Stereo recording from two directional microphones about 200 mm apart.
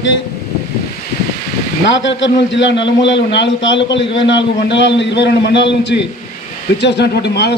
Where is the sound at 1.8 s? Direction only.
65° left (ahead or behind).